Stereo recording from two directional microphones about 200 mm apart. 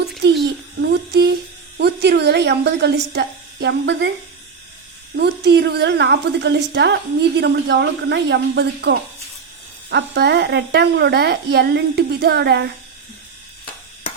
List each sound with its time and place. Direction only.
0.2 s a sound: 60° right (ahead or behind)
1.8 s a woman's voice: 55° right (ahead or behind)
5.1 s a woman's voice: 55° right (ahead or behind)